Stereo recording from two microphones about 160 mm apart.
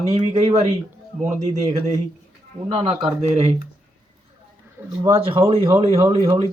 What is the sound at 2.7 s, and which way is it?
Speech, 35° right (ahead or behind).